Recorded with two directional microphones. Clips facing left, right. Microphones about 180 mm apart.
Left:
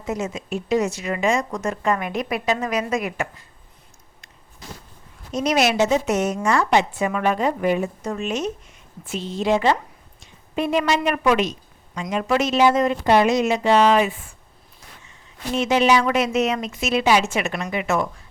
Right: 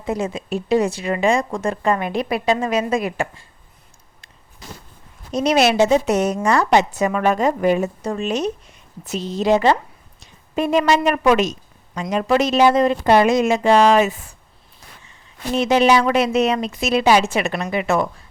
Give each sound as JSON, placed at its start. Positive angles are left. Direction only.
{"t": 0.0, "sound": "a woman's voice", "side_deg": -30}
{"t": 5.3, "sound": "a woman's voice", "side_deg": -30}
{"t": 15.5, "sound": "a woman's voice", "side_deg": -35}